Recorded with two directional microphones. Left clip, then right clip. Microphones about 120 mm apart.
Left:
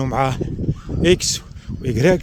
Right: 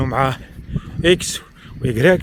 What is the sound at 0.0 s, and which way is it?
Speech, 35° left (ahead or behind).